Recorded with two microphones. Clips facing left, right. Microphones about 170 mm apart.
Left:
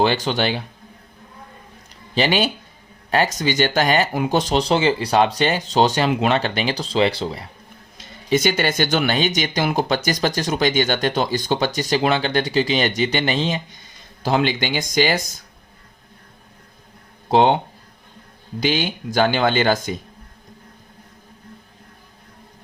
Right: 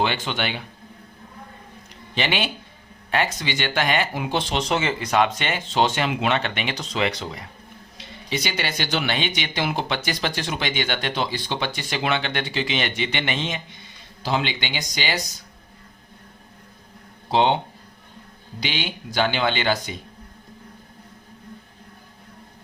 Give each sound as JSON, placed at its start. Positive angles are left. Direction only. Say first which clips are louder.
{"t": 0.0, "sound": "speech", "louder": "left 6 dB", "side_deg": 40}
{"t": 2.1, "sound": "speech", "louder": "left 6 dB", "side_deg": 40}
{"t": 7.9, "sound": "speech", "louder": "left 9 dB", "side_deg": 45}
{"t": 14.2, "sound": "speech", "louder": "left 5 dB", "side_deg": 50}
{"t": 17.3, "sound": "speech", "louder": "left 4 dB", "side_deg": 50}
{"t": 18.6, "sound": "speech", "louder": "left 8 dB", "side_deg": 45}